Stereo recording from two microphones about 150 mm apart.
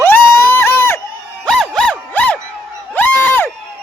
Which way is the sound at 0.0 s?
15° left (ahead or behind).